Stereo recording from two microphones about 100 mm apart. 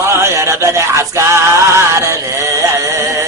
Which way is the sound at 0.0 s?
25° right (ahead or behind).